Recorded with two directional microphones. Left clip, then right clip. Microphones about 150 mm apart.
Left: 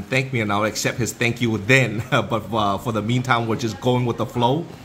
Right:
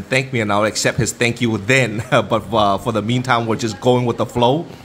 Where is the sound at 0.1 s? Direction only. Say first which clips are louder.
Right 4 dB; 20° right (ahead or behind).